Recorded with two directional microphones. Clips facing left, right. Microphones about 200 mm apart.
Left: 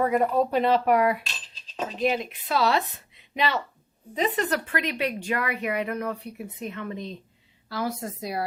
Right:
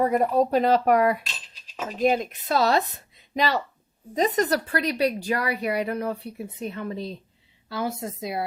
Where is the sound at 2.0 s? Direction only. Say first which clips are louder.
Right 4 dB; 45° right (ahead or behind).